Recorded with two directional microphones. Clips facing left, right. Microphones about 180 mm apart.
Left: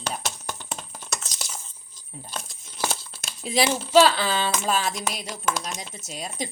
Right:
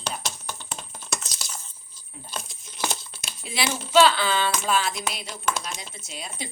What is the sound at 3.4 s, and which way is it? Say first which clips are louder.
Speech: left 6 dB; 40° left (ahead or behind).